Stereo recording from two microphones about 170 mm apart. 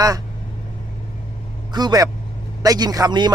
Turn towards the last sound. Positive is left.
turn(degrees=-25)  # may be behind; listen again after turning